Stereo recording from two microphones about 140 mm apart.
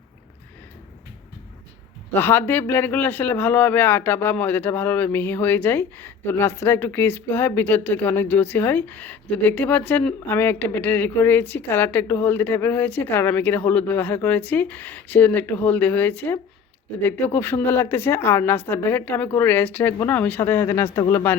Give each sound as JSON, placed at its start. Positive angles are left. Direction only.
{"t": 2.1, "sound": "speech", "side_deg": 15}